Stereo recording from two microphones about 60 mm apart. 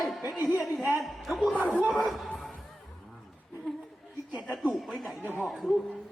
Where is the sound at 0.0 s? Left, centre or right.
Centre.